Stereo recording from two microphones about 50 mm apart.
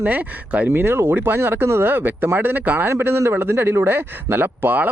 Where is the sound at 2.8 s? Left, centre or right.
Right.